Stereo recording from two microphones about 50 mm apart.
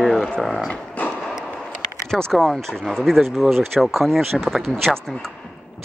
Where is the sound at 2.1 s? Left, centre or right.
Centre.